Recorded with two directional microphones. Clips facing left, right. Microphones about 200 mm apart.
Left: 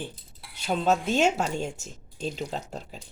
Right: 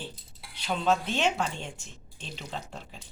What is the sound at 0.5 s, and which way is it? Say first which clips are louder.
A woman's voice: left 2 dB; 45° left (ahead or behind).